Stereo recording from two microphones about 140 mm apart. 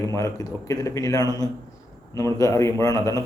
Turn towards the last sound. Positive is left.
turn(degrees=25)  # may be behind; listen again after turning